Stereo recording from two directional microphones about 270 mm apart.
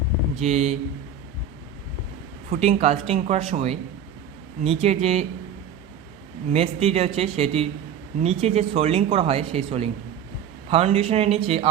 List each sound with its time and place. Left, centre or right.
0.3 s speech: right
2.5 s speech: right
6.5 s speech: right